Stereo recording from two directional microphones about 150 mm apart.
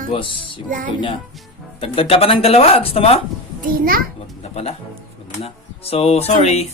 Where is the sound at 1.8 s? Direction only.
40° left (ahead or behind).